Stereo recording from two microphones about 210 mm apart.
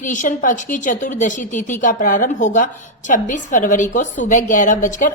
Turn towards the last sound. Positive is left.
turn(degrees=40)  # may be behind; listen again after turning